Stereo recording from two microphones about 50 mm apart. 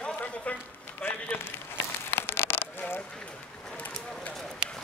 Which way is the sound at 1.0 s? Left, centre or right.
Left.